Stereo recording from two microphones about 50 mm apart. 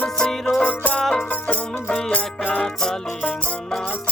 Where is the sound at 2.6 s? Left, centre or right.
Centre.